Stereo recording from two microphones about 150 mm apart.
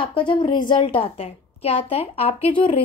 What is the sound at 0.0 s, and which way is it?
A woman's voice, 35° left (ahead or behind).